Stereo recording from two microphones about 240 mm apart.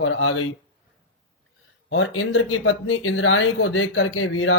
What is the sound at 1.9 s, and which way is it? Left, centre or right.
Speech, left.